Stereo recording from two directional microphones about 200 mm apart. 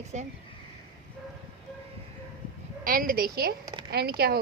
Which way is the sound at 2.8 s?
45° right (ahead or behind).